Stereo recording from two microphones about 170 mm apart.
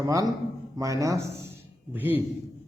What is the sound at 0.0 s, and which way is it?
A man's voice, 20° right (ahead or behind).